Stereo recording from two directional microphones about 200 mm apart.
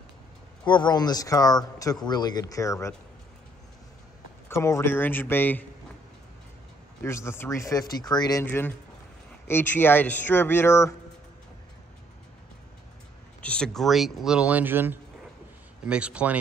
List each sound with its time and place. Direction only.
0.7 s speech: 20° left (ahead or behind)
4.5 s speech: 15° left (ahead or behind)
7.0 s speech: 15° left (ahead or behind)
13.4 s speech: 5° left (ahead or behind)